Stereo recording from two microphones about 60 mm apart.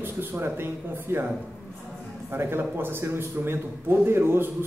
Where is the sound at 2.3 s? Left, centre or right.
Right.